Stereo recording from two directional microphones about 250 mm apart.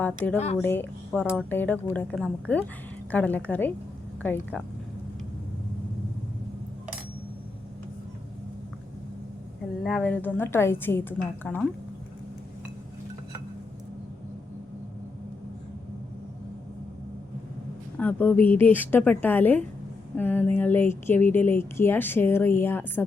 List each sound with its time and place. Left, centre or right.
0.0 s speech: centre
0.3 s speech: left
0.6 s a woman's voice: centre
9.8 s speech: centre
17.9 s speech: centre